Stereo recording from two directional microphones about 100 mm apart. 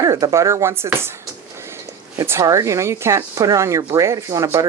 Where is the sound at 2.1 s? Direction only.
30° right (ahead or behind).